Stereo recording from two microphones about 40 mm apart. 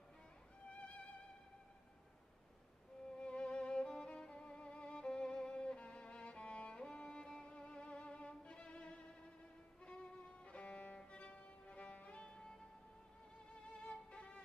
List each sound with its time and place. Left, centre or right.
0.7 s music: left
3.2 s violin: left
10.4 s music: left
13.8 s violin: left